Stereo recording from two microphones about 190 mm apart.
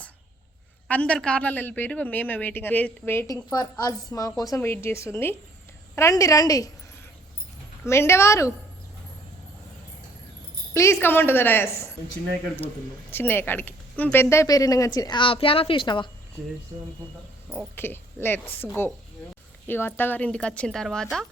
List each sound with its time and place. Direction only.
0.9 s a man's voice: 5° left (ahead or behind)
7.9 s a man's voice: 15° left (ahead or behind)
11.0 s a man's voice: 10° left (ahead or behind)
17.7 s a man's voice: 10° left (ahead or behind)